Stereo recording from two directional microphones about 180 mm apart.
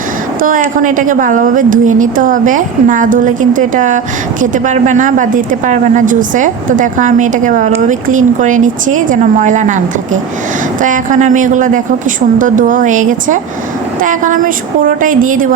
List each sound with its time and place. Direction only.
0.4 s a woman's voice: 45° right (ahead or behind)